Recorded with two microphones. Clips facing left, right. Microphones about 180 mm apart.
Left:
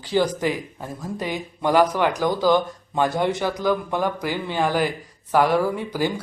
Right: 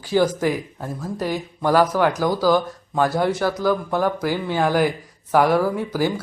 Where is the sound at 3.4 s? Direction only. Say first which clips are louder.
Right 3 dB; 15° left (ahead or behind).